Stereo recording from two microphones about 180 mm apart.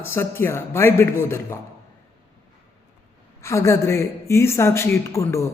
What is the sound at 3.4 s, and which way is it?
A man's voice, 15° left (ahead or behind).